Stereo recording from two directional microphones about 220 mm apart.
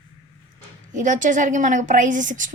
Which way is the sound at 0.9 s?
35° right (ahead or behind).